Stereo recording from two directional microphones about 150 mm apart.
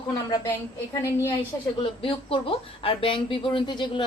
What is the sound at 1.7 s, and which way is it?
Speech, 35° left (ahead or behind).